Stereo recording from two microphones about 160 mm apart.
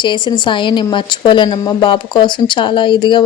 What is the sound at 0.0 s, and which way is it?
A woman's voice, 30° left (ahead or behind).